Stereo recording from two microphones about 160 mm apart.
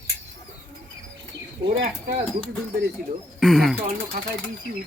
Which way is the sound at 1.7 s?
55° right (ahead or behind).